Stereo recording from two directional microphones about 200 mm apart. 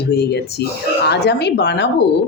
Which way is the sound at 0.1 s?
55° left (ahead or behind).